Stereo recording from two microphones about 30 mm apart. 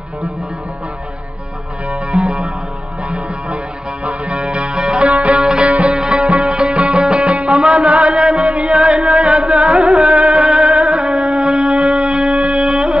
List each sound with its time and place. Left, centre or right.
2.0 s music: right
4.0 s music: right
7.2 s music: right
7.6 s music: right
7.9 s music: right